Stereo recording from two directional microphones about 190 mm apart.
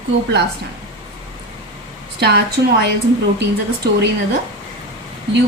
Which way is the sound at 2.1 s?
60° right (ahead or behind).